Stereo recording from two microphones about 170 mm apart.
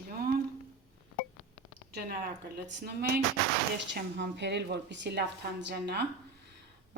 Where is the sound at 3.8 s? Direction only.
90° right.